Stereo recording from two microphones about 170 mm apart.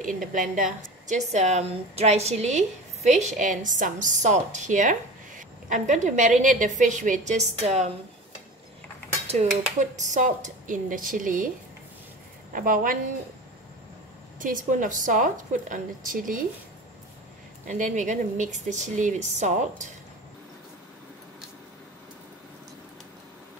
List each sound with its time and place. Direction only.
0.0 s a woman's voice: 50° right (ahead or behind)
9.3 s a woman's voice: 45° right (ahead or behind)
12.5 s a woman's voice: 55° right (ahead or behind)
14.4 s a woman's voice: 50° right (ahead or behind)
17.6 s a woman's voice: 45° right (ahead or behind)